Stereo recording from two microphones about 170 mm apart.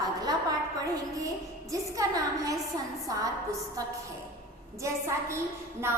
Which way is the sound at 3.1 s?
20° right (ahead or behind).